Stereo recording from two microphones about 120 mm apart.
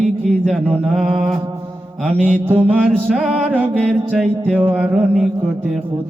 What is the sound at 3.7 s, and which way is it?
Mantra, 5° left (ahead or behind).